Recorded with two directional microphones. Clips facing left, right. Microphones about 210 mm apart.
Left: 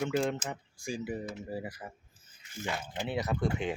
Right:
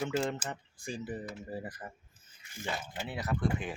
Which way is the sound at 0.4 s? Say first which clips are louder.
Left 2 dB; 10° left (ahead or behind).